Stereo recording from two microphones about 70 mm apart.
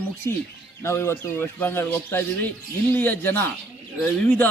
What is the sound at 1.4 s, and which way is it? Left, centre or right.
A man's voice, left.